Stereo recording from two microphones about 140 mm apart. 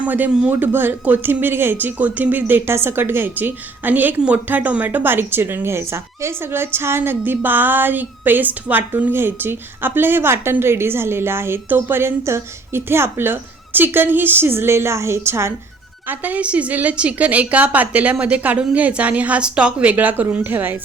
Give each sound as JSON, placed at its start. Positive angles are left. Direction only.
{"t": 0.0, "sound": "speech", "side_deg": -10}